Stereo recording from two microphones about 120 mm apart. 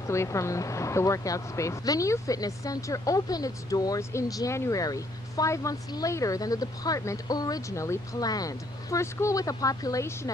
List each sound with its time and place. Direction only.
0.0 s speech: 25° left (ahead or behind)